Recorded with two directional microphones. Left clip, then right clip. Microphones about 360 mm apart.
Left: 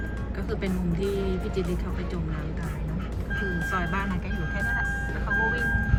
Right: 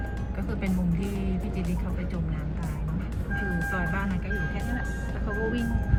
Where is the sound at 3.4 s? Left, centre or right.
Centre.